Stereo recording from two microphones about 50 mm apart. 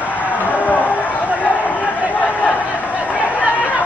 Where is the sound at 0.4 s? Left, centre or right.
Left.